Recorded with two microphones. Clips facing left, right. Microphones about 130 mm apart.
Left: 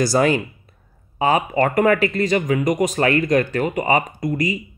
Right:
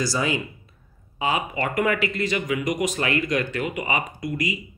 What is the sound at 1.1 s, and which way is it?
Speech, 45° left (ahead or behind).